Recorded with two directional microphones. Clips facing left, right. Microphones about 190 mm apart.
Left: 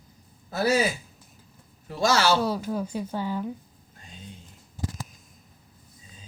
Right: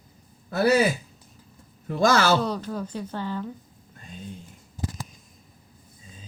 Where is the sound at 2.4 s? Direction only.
10° left (ahead or behind).